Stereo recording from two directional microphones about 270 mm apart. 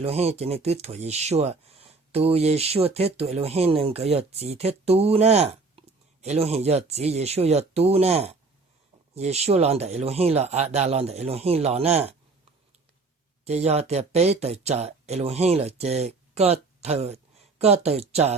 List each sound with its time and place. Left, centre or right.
0.0 s speech: right
13.4 s speech: right